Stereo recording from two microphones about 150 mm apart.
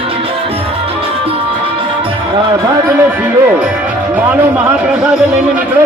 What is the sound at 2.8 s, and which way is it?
Speech, 15° right (ahead or behind).